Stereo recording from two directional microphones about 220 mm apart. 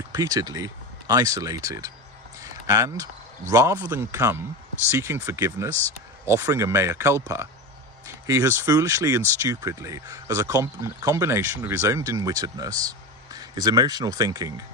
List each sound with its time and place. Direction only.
0.1 s speech: 15° right (ahead or behind)
2.4 s a sound: 15° right (ahead or behind)
3.5 s speech: 15° right (ahead or behind)